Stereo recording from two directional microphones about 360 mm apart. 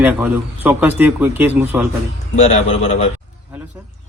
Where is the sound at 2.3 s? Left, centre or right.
Centre.